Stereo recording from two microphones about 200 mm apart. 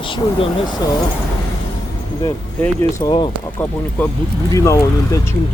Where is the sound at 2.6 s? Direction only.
10° left (ahead or behind).